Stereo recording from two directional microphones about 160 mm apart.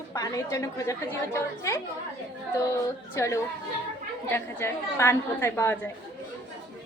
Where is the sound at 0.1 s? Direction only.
20° left (ahead or behind).